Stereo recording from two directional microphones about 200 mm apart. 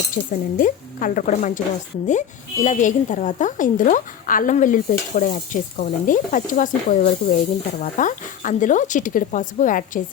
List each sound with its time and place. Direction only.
0.2 s a woman's voice: 45° left (ahead or behind)
2.6 s a woman's voice: 40° left (ahead or behind)